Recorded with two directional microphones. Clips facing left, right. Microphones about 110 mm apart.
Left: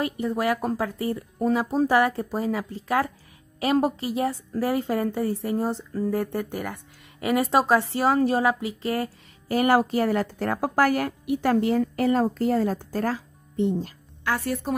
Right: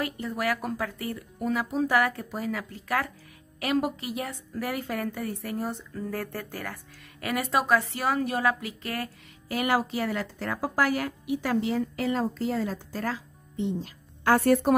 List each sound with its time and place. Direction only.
0.0 s a woman's voice: 25° left (ahead or behind)
9.5 s a woman's voice: 40° left (ahead or behind)
14.2 s a woman's voice: 45° right (ahead or behind)